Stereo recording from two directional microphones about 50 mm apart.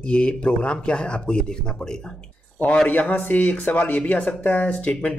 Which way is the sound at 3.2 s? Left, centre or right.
Left.